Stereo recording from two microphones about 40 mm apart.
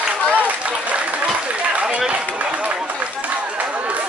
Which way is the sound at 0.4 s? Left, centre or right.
Right.